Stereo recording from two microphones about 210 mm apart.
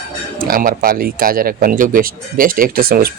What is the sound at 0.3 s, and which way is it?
Speech, 40° right (ahead or behind).